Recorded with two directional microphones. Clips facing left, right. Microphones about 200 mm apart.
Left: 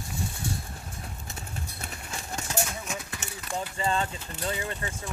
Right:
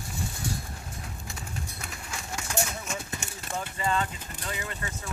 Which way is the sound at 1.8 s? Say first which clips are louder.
Left 1 dB; 35° left (ahead or behind).